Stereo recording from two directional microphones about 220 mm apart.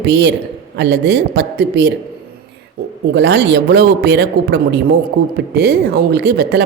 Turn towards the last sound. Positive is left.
turn(degrees=-50)  # may be behind; listen again after turning